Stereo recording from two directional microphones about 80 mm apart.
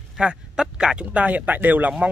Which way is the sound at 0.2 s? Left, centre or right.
Centre.